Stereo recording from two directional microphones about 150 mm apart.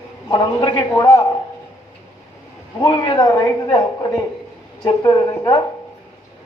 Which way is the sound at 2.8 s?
30° left (ahead or behind).